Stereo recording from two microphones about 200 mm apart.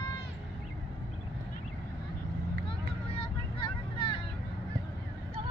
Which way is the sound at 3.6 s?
25° left (ahead or behind).